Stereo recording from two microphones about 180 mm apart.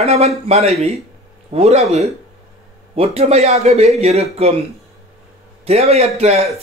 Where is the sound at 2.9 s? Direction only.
35° right (ahead or behind).